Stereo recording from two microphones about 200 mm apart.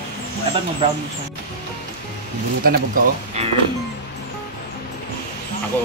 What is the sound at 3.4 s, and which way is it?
Speech, 35° right (ahead or behind).